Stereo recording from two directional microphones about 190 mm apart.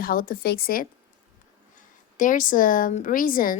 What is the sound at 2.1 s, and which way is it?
A woman's voice, 45° left (ahead or behind).